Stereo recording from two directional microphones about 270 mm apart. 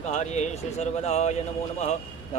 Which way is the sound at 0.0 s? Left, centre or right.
Left.